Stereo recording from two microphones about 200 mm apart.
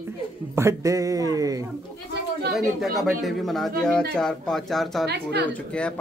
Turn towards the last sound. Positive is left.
turn(degrees=5)  # may be behind; listen again after turning